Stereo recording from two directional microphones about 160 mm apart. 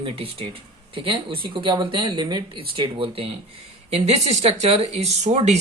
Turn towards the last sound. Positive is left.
turn(degrees=-45)  # may be behind; listen again after turning